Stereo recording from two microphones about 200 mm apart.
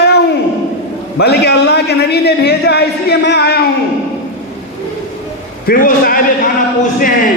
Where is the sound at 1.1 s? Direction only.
55° left (ahead or behind).